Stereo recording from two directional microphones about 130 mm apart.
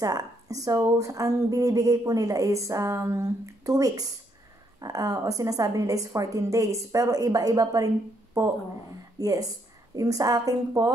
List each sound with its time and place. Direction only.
0.0 s a woman's voice: 30° right (ahead or behind)